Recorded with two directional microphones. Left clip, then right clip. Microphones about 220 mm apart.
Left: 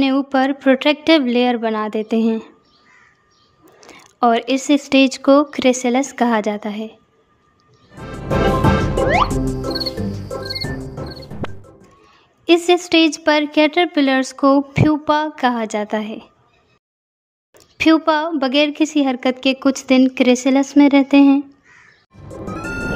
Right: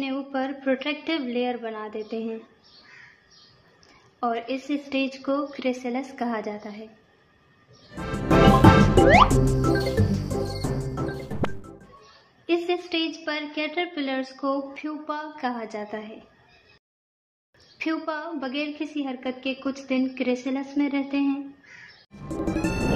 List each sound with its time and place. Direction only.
0.0 s speech: 50° left (ahead or behind)
3.8 s speech: 45° left (ahead or behind)
7.9 s music: centre (ahead or behind)
12.4 s speech: 50° left (ahead or behind)
17.7 s speech: 50° left (ahead or behind)
22.1 s music: centre (ahead or behind)